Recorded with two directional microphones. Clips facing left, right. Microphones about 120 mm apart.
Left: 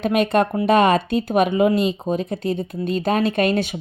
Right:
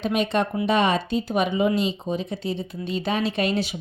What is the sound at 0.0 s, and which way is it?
Speech, 55° left (ahead or behind).